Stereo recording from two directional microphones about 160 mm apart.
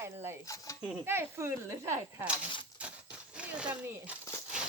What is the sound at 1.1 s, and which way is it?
Speech, 15° right (ahead or behind).